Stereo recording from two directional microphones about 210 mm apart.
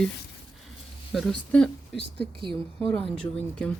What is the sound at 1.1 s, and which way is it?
Speech, centre (ahead or behind).